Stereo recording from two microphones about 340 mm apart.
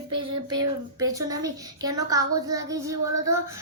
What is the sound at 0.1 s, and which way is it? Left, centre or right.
Child singing, centre.